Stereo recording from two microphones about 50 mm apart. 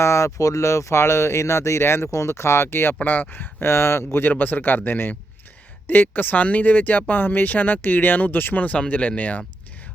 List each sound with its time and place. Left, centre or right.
0.0 s speech: left
3.0 s speech: left
3.7 s speech: left